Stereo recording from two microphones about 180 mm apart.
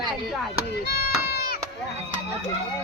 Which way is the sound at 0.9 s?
60° left (ahead or behind).